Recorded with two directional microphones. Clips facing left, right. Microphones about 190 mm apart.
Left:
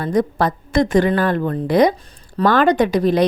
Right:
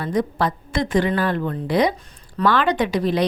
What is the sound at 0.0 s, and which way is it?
Speech, 45° left (ahead or behind).